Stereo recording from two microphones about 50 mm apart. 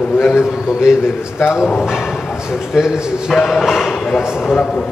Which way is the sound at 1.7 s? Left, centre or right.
Centre.